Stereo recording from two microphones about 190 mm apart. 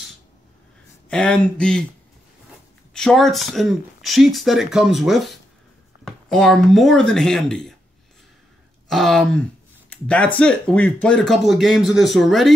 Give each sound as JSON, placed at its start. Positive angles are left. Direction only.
{"t": 1.0, "sound": "speech", "side_deg": 5}
{"t": 2.9, "sound": "speech", "side_deg": 5}
{"t": 8.8, "sound": "speech", "side_deg": 0}